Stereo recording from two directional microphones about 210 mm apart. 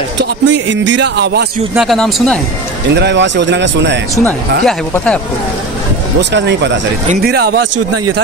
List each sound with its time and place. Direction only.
0.2 s speech: 60° right (ahead or behind)
1.8 s speech: centre (ahead or behind)
2.9 s speech: 55° right (ahead or behind)
4.1 s speech: 10° left (ahead or behind)
6.3 s speech: 55° right (ahead or behind)